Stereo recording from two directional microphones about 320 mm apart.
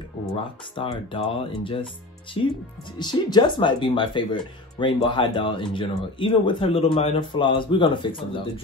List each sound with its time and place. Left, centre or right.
0.7 s speech: centre